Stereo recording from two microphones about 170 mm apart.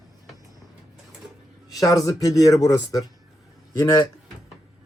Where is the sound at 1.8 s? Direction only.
20° left (ahead or behind).